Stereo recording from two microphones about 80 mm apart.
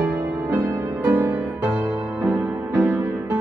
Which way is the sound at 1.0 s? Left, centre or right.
Right.